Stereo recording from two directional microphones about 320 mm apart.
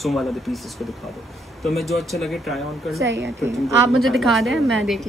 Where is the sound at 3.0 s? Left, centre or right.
Right.